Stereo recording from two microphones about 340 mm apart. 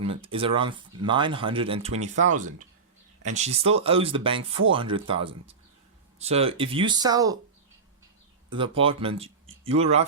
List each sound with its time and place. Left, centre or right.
0.0 s speech: centre
8.4 s speech: centre